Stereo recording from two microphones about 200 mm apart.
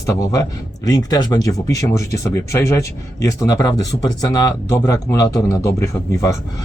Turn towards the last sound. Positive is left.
turn(degrees=15)  # may be behind; listen again after turning